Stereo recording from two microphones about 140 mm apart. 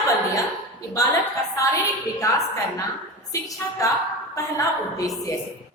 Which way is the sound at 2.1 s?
25° left (ahead or behind).